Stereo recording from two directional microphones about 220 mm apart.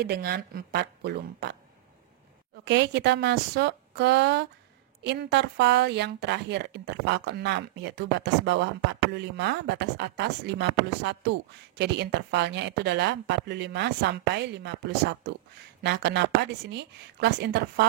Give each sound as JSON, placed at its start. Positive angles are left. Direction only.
{"t": 0.0, "sound": "speech", "side_deg": -45}
{"t": 2.6, "sound": "speech", "side_deg": -50}